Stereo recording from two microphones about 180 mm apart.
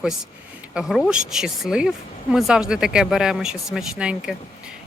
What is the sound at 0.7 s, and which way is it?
Speech, centre (ahead or behind).